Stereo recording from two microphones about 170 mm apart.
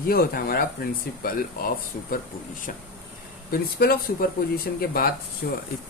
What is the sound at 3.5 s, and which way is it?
Speech, 60° left (ahead or behind).